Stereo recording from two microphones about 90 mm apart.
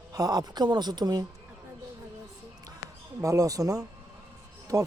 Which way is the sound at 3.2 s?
40° right (ahead or behind).